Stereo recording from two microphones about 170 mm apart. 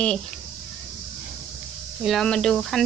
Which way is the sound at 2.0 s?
5° left (ahead or behind).